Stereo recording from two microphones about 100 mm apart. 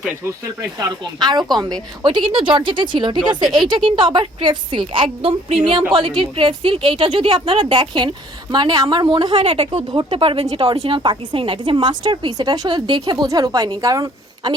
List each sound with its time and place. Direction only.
0.8 s a woman's voice: 45° right (ahead or behind)
3.7 s a woman's voice: 55° right (ahead or behind)
5.9 s a woman's voice: 55° right (ahead or behind); by 9.8 s 70° right (ahead or behind)
9.9 s a woman's voice: 55° right (ahead or behind)
10.8 s a woman's voice: 55° right (ahead or behind); by 14.5 s 35° right (ahead or behind)